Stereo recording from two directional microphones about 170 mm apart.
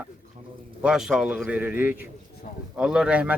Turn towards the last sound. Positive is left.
turn(degrees=-5)  # may be behind; listen again after turning